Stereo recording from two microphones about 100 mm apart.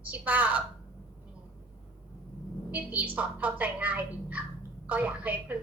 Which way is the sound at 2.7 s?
15° right (ahead or behind).